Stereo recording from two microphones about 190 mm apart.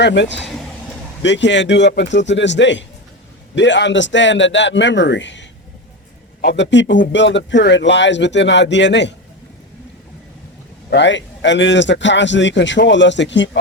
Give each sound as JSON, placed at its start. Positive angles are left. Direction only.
{"t": 0.0, "sound": "a man's voice", "side_deg": 65}
{"t": 10.8, "sound": "a man's voice", "side_deg": 65}